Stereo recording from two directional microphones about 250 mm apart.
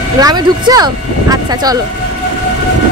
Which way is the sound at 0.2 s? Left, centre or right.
Centre.